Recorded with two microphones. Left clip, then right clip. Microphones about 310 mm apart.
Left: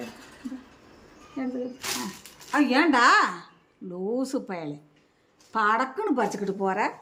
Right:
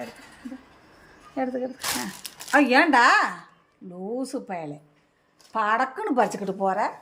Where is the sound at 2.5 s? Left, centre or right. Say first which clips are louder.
Right 4 dB; centre.